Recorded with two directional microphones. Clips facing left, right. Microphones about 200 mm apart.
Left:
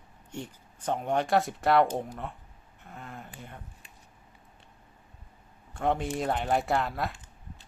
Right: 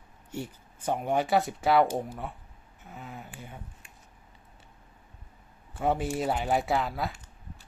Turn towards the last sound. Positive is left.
turn(degrees=0)  # may be behind; listen again after turning